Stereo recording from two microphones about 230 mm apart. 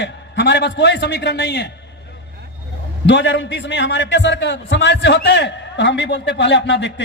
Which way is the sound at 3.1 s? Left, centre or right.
Left.